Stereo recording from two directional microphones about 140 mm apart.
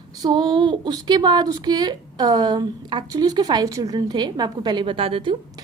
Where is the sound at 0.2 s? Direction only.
35° right (ahead or behind).